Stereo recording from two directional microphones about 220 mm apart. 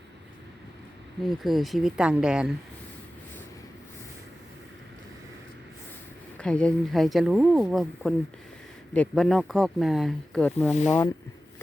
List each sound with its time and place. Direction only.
1.3 s speech: centre (ahead or behind)
6.4 s speech: 5° left (ahead or behind)